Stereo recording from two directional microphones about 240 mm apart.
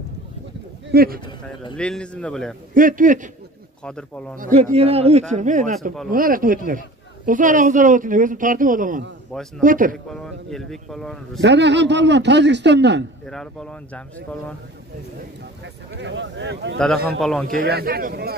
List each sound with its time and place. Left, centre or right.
0.8 s a man's voice: right
1.8 s speech: centre
2.7 s speech: right
3.8 s speech: centre
4.4 s a man's voice: right
10.0 s speech: centre
11.4 s speech: right
13.2 s speech: centre
15.6 s speech: right
16.7 s speech: centre
17.5 s speech: right